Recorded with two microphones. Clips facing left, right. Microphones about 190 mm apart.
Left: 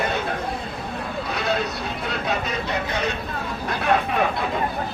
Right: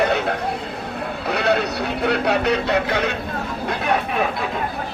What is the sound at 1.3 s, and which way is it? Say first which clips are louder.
Speech: right 6 dB; 70° right (ahead or behind).